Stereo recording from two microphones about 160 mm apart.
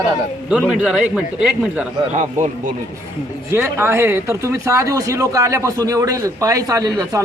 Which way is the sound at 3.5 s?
15° right (ahead or behind).